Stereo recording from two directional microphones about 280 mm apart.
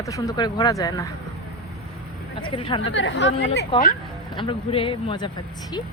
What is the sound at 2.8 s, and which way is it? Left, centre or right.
Speech, left.